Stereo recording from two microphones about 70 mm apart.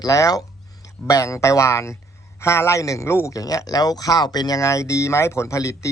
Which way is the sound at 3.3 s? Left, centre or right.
Left.